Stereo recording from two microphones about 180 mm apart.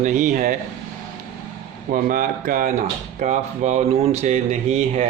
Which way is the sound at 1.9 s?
50° right (ahead or behind).